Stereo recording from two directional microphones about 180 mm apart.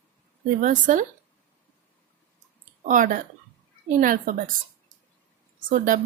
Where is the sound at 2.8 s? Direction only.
45° right (ahead or behind).